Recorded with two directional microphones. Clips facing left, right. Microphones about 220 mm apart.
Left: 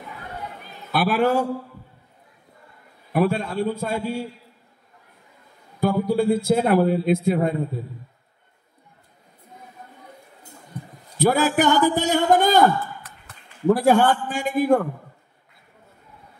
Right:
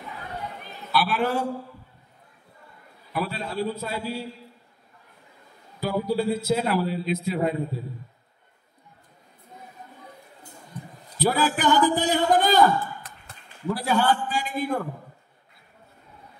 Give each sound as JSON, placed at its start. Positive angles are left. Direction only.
{"t": 0.9, "sound": "a man's voice", "side_deg": 45}
{"t": 3.1, "sound": "a man's voice", "side_deg": 50}
{"t": 5.8, "sound": "a man's voice", "side_deg": 50}
{"t": 11.1, "sound": "a man's voice", "side_deg": 45}
{"t": 13.7, "sound": "a man's voice", "side_deg": 50}